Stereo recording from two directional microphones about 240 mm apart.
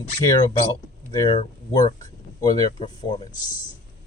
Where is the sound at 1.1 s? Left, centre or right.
Centre.